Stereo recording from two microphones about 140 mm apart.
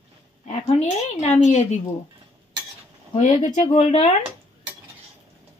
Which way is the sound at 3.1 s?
60° left (ahead or behind).